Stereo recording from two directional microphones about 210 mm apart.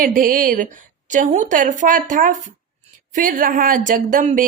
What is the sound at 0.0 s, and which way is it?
A woman's voice, 40° right (ahead or behind).